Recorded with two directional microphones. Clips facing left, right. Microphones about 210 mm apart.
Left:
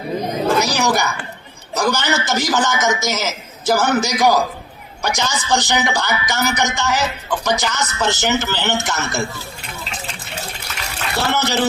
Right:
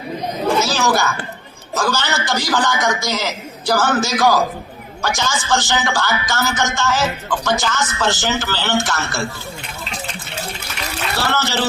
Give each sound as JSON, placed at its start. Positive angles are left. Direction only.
{"t": 0.6, "sound": "a man's voice", "side_deg": 15}
{"t": 11.3, "sound": "speech", "side_deg": 20}